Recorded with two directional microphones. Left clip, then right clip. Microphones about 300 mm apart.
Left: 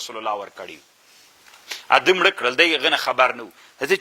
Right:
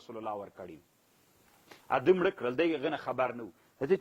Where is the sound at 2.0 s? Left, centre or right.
Centre.